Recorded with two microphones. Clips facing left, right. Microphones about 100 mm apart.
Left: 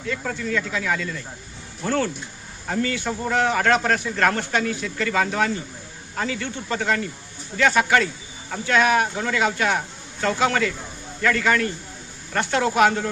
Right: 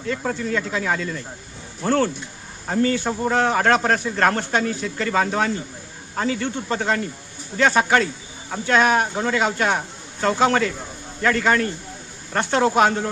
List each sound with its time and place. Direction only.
0.1 s a man's voice: 30° right (ahead or behind)